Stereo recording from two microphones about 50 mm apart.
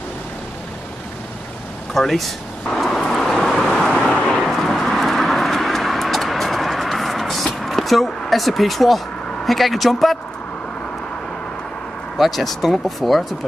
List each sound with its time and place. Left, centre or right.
2.0 s speech: centre
2.7 s vehicle: centre
4.1 s vehicle: centre
4.4 s vehicle: centre
12.2 s speech: centre